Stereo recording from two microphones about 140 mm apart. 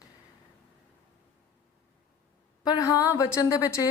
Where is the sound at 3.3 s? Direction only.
20° left (ahead or behind).